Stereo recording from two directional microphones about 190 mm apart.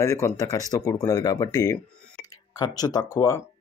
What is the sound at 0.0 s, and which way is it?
Speech, 15° left (ahead or behind).